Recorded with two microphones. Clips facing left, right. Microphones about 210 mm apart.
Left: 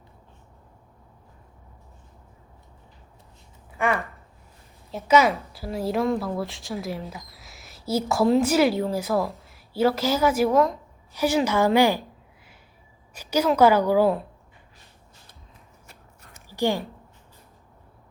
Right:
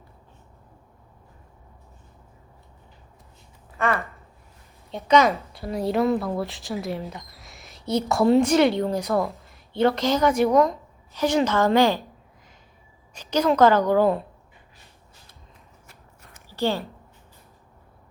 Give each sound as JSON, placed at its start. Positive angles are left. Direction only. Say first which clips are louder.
{"t": 3.8, "sound": "a woman's voice", "louder": "even", "side_deg": 15}
{"t": 13.1, "sound": "a woman's voice", "louder": "right 1 dB", "side_deg": 10}
{"t": 16.5, "sound": "a woman's voice", "louder": "left 1 dB", "side_deg": 15}